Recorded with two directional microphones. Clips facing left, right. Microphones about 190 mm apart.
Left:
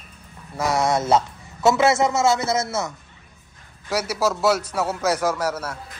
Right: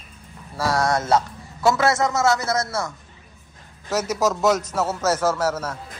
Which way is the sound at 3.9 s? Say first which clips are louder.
Right 1 dB; 10° left (ahead or behind).